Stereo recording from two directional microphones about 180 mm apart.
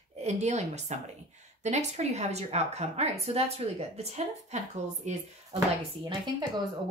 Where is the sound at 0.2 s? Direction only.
40° right (ahead or behind).